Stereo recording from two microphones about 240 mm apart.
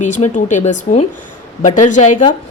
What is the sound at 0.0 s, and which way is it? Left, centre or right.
A woman's voice, left.